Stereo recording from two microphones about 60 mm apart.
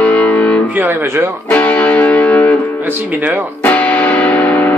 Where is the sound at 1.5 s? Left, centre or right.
Left.